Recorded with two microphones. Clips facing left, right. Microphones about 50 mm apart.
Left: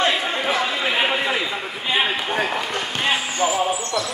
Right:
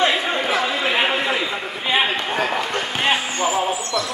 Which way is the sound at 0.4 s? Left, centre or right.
Centre.